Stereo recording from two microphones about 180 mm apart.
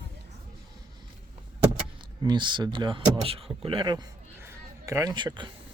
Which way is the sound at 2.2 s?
25° right (ahead or behind).